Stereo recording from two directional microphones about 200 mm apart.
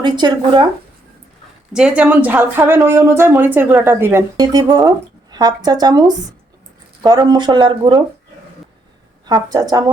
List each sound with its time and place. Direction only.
0.0 s speech: 20° right (ahead or behind)
1.7 s speech: 5° right (ahead or behind); by 8.0 s 25° right (ahead or behind)
9.2 s speech: 20° right (ahead or behind)